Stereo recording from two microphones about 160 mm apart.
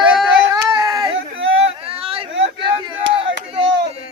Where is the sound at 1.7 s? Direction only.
35° right (ahead or behind).